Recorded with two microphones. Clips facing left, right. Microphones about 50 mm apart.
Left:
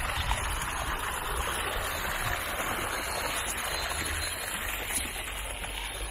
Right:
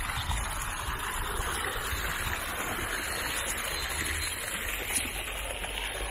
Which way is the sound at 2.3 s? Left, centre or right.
Left.